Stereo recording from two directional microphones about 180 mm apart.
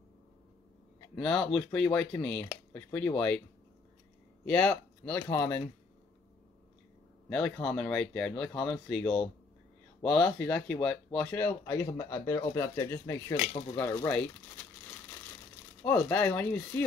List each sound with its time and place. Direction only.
1.1 s speech: 5° left (ahead or behind)
4.5 s speech: 5° left (ahead or behind)
7.2 s speech: 5° left (ahead or behind)
15.8 s speech: 10° left (ahead or behind)